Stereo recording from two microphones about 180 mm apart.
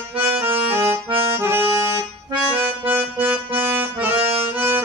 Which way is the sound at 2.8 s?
30° right (ahead or behind).